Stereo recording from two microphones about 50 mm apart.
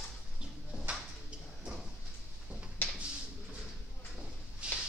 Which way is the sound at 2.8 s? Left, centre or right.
Left.